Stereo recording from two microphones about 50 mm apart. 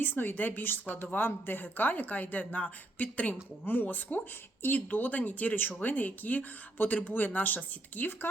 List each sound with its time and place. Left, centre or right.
0.0 s speech: left